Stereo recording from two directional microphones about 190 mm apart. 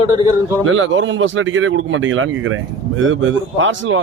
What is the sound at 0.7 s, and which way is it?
Speech, 90° right.